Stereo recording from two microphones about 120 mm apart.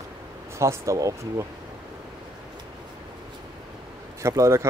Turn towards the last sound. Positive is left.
turn(degrees=-25)  # may be behind; listen again after turning